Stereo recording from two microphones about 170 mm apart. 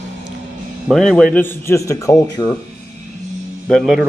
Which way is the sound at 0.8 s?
5° left (ahead or behind).